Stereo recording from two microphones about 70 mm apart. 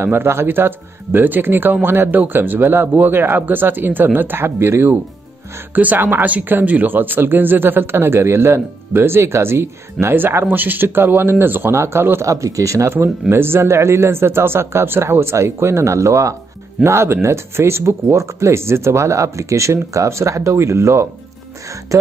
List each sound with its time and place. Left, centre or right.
0.0 s speech: right
12.3 s speech: right